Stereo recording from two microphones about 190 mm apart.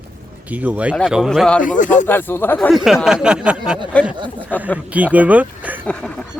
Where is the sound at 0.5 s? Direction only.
10° right (ahead or behind).